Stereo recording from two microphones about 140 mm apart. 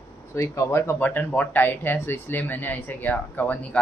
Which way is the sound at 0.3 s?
20° left (ahead or behind).